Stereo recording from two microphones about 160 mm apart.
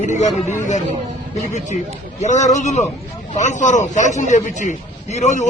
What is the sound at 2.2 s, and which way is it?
A man's voice, 50° left (ahead or behind).